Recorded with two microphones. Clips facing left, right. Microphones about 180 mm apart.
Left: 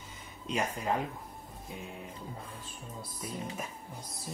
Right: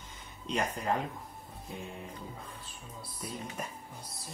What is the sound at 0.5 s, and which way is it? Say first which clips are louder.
Speech: even; 5° left (ahead or behind).